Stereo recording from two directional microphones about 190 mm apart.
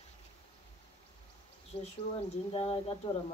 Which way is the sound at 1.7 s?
30° left (ahead or behind).